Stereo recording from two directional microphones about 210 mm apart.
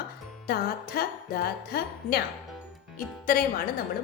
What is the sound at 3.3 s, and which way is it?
Music, 45° left (ahead or behind).